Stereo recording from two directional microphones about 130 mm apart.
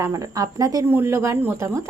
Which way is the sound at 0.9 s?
15° right (ahead or behind).